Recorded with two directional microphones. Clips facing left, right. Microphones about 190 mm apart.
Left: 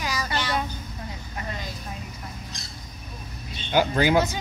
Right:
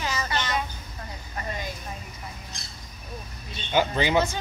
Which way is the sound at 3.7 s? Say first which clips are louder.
Left 2 dB; 5° left (ahead or behind).